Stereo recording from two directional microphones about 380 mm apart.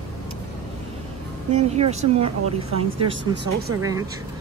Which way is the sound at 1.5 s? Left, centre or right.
Centre.